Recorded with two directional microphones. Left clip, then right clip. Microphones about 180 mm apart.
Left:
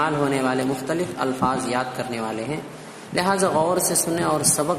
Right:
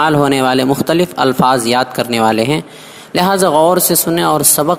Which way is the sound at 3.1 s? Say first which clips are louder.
Right 9 dB; 45° right (ahead or behind).